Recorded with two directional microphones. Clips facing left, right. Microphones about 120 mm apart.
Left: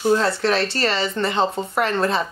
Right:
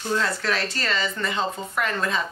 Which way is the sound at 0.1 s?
30° left (ahead or behind).